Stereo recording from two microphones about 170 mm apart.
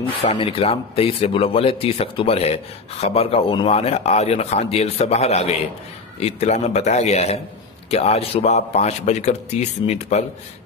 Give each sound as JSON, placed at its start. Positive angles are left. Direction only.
{"t": 0.2, "sound": "speech", "side_deg": 35}